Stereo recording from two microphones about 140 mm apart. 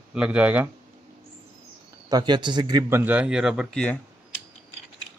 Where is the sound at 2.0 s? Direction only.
30° right (ahead or behind).